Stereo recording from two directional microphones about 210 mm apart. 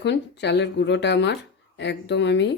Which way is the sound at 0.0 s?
55° left (ahead or behind).